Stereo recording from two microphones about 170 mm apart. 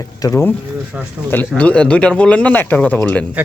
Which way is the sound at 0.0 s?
20° left (ahead or behind).